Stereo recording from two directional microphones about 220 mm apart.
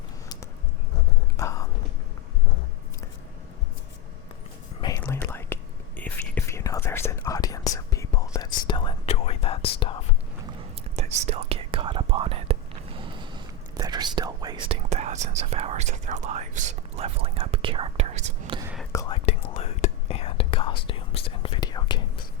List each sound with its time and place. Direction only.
1.4 s whispering: 15° left (ahead or behind)
4.8 s whispering: 15° left (ahead or behind)
10.9 s whispering: 30° right (ahead or behind)
18.9 s whispering: 15° left (ahead or behind)